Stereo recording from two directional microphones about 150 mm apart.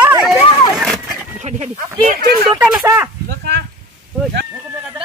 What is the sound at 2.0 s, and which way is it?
Speech, 75° right (ahead or behind).